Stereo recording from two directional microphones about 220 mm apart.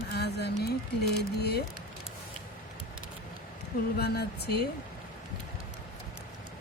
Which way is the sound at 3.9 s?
45° left (ahead or behind).